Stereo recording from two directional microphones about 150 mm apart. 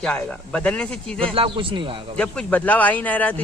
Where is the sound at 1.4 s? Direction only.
35° right (ahead or behind).